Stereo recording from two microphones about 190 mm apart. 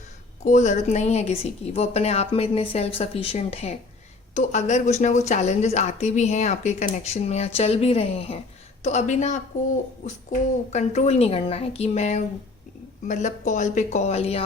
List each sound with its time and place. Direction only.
0.4 s speech: 40° left (ahead or behind)
10.7 s speech: 35° left (ahead or behind)